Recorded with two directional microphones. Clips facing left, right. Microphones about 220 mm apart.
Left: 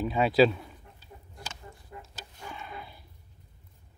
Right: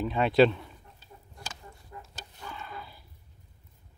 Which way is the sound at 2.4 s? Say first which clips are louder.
Even; 15° left (ahead or behind).